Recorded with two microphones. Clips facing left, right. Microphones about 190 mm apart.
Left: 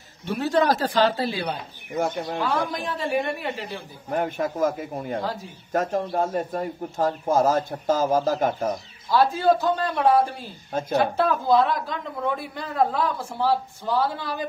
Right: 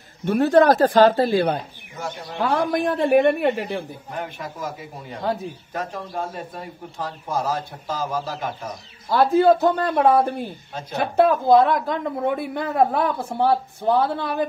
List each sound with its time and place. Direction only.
0.2 s speech: 55° right (ahead or behind)
2.0 s a man's voice: 50° left (ahead or behind)
2.4 s a woman's voice: 55° right (ahead or behind)
4.1 s a man's voice: 50° left (ahead or behind)
9.1 s a woman's voice: 60° right (ahead or behind)
10.7 s a man's voice: 45° left (ahead or behind)
11.1 s a woman's voice: 55° right (ahead or behind)